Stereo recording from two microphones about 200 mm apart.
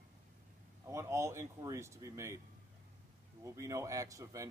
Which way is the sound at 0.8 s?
15° right (ahead or behind).